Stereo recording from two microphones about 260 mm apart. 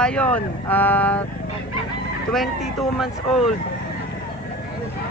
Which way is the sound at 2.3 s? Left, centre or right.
Centre.